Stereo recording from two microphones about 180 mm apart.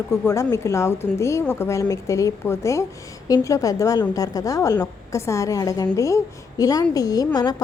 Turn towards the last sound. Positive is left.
turn(degrees=20)  # may be behind; listen again after turning